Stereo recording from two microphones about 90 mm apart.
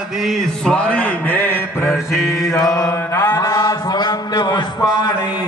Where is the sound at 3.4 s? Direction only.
45° left (ahead or behind).